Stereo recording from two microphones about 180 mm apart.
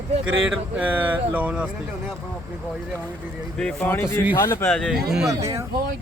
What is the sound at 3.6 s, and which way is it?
Speech, 5° left (ahead or behind).